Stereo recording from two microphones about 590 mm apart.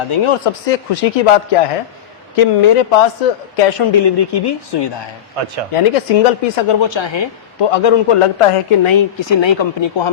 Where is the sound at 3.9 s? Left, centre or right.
Left.